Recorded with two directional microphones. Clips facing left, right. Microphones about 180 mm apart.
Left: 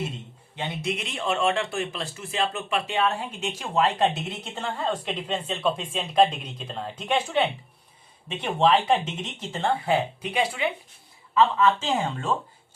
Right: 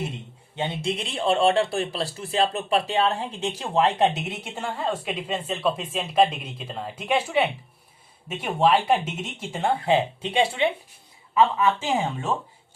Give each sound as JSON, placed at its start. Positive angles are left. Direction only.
{"t": 0.5, "sound": "speech", "side_deg": -25}
{"t": 11.3, "sound": "speech", "side_deg": -15}